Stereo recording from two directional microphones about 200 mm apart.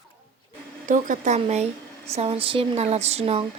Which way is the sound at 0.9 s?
40° right (ahead or behind).